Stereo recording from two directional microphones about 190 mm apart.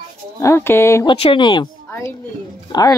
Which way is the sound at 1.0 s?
30° left (ahead or behind).